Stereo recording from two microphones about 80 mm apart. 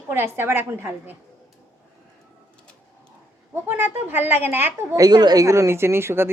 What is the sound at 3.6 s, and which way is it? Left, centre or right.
A woman's voice, right.